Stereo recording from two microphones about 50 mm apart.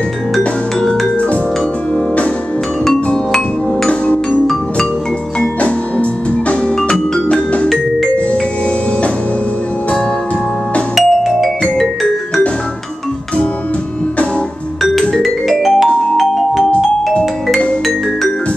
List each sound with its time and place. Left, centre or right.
6.9 s music: left
11.0 s music: centre
15.2 s music: centre